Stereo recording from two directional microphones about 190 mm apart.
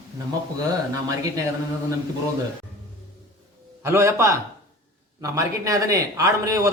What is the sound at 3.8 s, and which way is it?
A man's voice, 15° right (ahead or behind).